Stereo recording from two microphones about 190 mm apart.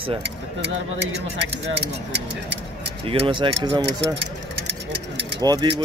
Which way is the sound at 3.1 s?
30° right (ahead or behind).